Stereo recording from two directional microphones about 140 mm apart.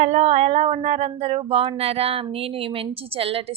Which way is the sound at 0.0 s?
55° right (ahead or behind).